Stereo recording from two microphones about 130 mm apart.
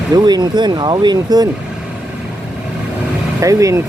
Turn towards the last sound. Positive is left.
turn(degrees=-25)  # may be behind; listen again after turning